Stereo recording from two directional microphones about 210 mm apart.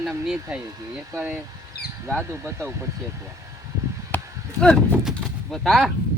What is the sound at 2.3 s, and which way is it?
Speech, 15° right (ahead or behind).